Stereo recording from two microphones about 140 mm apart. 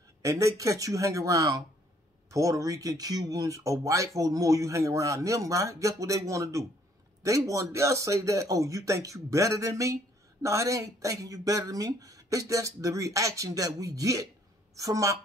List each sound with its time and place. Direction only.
0.2 s speech: 25° right (ahead or behind)